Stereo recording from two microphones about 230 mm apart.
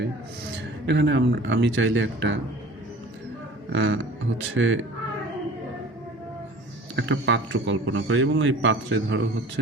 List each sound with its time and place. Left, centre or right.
0.9 s speech: right
3.7 s a man's voice: right
6.9 s a man's voice: right